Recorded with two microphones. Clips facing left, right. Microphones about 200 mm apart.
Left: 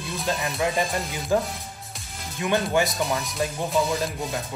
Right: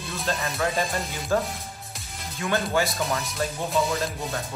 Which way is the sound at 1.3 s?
15° left (ahead or behind).